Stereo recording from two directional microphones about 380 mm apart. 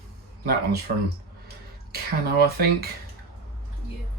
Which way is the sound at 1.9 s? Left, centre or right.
Right.